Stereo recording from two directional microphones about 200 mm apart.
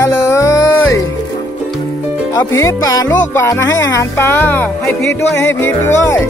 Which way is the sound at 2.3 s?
15° left (ahead or behind).